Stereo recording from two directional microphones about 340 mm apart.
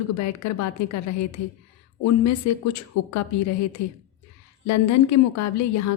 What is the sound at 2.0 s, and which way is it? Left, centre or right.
A woman's voice, left.